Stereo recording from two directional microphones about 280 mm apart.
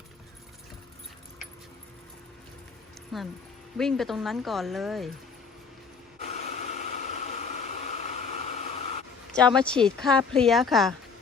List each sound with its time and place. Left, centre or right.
3.1 s speech: centre
6.1 s a sound: left
9.6 s speech: centre